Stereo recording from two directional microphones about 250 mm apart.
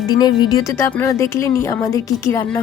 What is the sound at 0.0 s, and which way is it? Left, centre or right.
Speech, centre.